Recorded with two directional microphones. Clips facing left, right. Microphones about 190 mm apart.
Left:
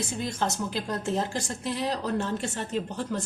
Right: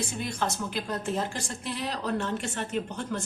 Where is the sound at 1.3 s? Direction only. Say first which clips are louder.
Left 4 dB; 40° left (ahead or behind).